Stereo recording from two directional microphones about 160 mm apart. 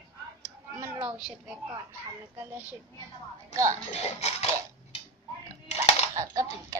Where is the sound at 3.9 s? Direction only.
40° left (ahead or behind).